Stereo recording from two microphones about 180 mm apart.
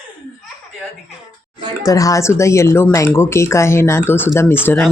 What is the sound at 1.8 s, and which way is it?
Speech, 20° left (ahead or behind).